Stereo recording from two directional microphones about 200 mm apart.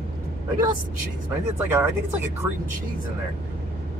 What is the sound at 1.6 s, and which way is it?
Speech, 10° right (ahead or behind).